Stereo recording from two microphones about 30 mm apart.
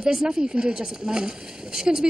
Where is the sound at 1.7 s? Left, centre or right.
Centre.